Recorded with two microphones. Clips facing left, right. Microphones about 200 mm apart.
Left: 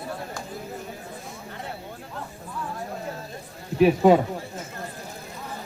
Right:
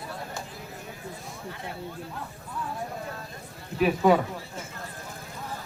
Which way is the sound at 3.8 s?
25° left (ahead or behind).